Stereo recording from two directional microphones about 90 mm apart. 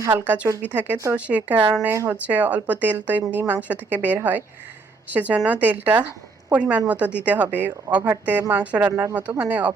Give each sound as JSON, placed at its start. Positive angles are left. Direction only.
{"t": 0.1, "sound": "a woman's voice", "side_deg": -20}
{"t": 1.9, "sound": "speech", "side_deg": -30}
{"t": 2.2, "sound": "a woman's voice", "side_deg": -15}
{"t": 8.9, "sound": "speech", "side_deg": -35}
{"t": 9.1, "sound": "a woman's voice", "side_deg": -20}